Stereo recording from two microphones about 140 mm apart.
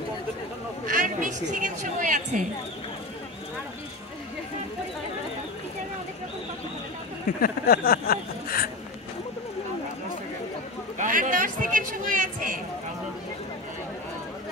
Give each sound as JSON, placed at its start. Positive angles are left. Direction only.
{"t": 0.8, "sound": "a woman's voice", "side_deg": -70}
{"t": 7.2, "sound": "speech", "side_deg": 90}
{"t": 11.0, "sound": "a man's voice", "side_deg": -70}